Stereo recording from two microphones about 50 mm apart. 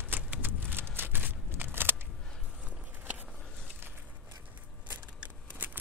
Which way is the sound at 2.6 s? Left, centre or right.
Right.